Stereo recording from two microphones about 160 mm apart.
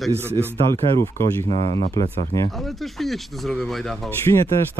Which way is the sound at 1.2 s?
55° left (ahead or behind).